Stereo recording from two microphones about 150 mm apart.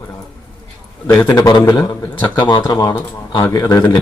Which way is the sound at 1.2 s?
20° left (ahead or behind).